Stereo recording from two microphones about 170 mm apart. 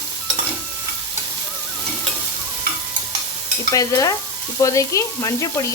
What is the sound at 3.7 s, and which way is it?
Stir, 20° left (ahead or behind).